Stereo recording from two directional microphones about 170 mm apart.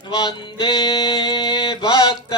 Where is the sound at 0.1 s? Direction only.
25° left (ahead or behind).